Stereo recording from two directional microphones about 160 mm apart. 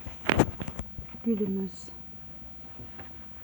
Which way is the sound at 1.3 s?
20° right (ahead or behind).